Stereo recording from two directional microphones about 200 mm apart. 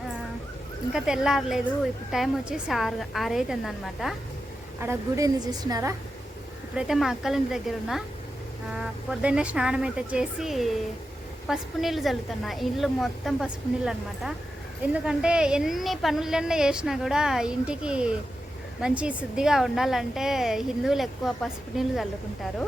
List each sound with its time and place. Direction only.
0.9 s a woman's voice: 5° right (ahead or behind)
4.8 s a woman's voice: 15° right (ahead or behind)
6.7 s a woman's voice: centre (ahead or behind)